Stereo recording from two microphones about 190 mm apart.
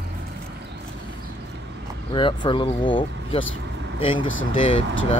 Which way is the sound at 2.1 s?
25° left (ahead or behind).